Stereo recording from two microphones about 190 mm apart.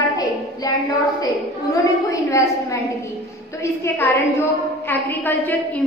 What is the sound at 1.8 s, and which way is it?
A woman's voice, 15° left (ahead or behind).